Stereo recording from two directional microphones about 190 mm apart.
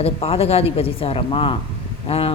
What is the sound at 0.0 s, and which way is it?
Speech, 30° left (ahead or behind).